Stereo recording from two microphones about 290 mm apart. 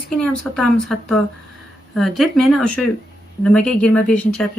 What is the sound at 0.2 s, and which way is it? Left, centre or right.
Speech, centre.